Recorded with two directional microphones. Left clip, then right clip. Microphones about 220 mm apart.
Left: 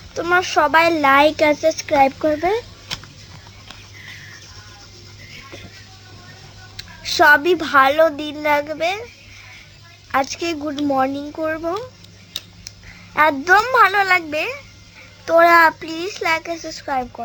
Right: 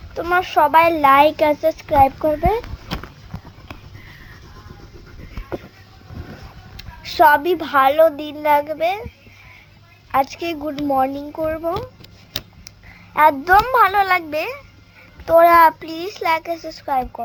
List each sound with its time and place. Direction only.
0.1 s a child's voice: 20° left (ahead or behind)
6.7 s a child's voice: 20° left (ahead or behind)
10.1 s a child's voice: 20° left (ahead or behind)
12.4 s a sound: 25° right (ahead or behind)
13.1 s a child's voice: 15° left (ahead or behind)